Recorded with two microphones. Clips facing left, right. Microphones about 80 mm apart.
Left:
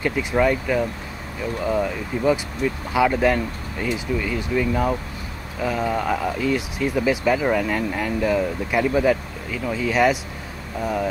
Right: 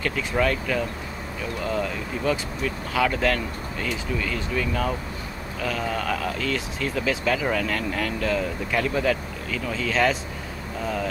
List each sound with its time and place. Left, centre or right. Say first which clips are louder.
0.0 s speech: left 4 dB; centre